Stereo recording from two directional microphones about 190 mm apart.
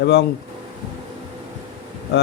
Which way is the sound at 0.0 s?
60° left (ahead or behind).